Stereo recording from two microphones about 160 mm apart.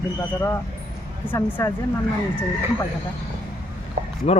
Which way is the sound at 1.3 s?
15° left (ahead or behind).